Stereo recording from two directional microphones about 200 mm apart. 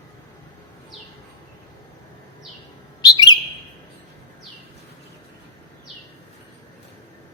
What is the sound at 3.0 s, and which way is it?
Bird, 20° left (ahead or behind).